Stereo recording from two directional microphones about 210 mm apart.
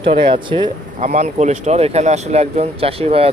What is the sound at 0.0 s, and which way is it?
Speech, 25° right (ahead or behind).